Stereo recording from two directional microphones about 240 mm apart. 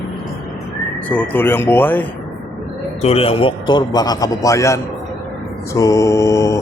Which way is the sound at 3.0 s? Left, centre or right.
Left.